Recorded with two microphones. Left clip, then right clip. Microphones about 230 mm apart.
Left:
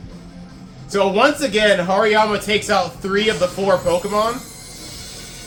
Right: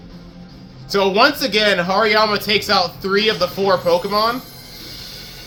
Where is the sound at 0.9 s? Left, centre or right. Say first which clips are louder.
Right 1 dB; right.